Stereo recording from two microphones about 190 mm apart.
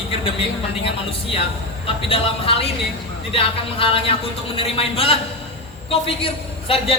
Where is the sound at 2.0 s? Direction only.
30° left (ahead or behind).